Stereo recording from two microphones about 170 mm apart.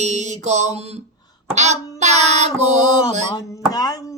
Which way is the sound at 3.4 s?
20° left (ahead or behind).